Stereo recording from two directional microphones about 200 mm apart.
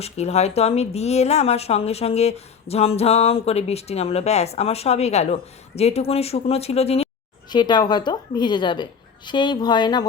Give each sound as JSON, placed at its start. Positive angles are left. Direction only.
{"t": 0.0, "sound": "a woman's voice", "side_deg": 30}